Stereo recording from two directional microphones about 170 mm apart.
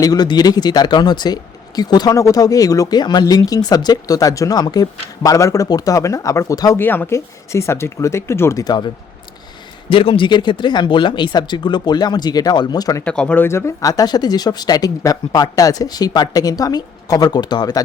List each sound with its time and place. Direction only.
0.0 s speech: 20° left (ahead or behind)
9.9 s speech: 30° left (ahead or behind)
13.1 s speech: 5° left (ahead or behind); by 17.8 s 25° left (ahead or behind)